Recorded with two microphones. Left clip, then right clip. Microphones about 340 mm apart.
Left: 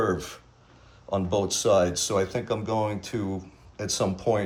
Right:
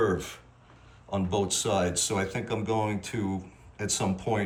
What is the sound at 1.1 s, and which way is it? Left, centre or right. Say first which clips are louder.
Speech: left 3 dB; centre.